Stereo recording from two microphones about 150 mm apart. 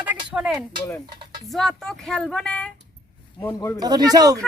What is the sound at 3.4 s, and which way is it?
Speech, 15° left (ahead or behind).